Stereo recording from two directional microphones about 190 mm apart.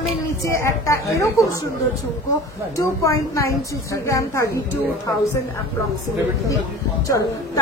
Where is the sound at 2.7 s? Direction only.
15° left (ahead or behind).